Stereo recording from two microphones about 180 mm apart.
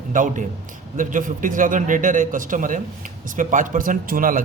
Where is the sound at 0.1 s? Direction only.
45° right (ahead or behind).